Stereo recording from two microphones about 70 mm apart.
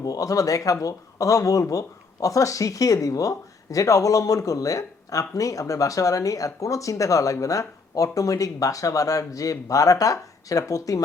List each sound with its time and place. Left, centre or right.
0.0 s speech: left